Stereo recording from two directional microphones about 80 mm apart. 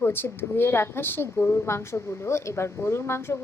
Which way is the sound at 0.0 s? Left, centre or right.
Left.